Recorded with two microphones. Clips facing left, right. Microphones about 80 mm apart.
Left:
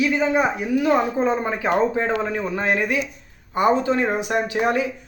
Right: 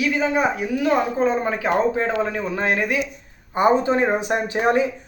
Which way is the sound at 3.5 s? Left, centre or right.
Right.